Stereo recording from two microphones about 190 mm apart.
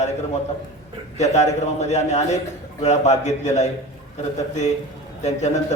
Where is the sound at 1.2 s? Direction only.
35° left (ahead or behind).